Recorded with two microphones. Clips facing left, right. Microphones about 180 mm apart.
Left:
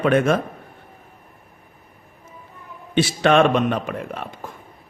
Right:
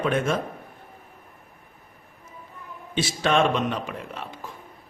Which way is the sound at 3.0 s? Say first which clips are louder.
Left 6 dB; 60° left (ahead or behind).